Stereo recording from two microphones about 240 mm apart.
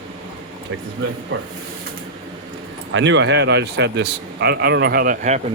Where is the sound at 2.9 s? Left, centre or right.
Right.